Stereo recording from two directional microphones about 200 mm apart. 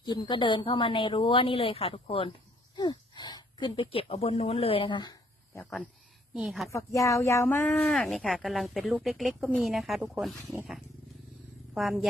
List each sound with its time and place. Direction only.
0.0 s a woman's voice: 20° left (ahead or behind)
5.5 s speech: 5° left (ahead or behind)
6.7 s speech: 15° left (ahead or behind); by 12.0 s centre (ahead or behind)